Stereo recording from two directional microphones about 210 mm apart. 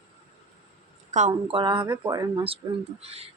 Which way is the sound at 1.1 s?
30° right (ahead or behind).